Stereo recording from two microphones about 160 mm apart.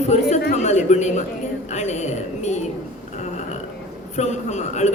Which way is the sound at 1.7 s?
45° left (ahead or behind).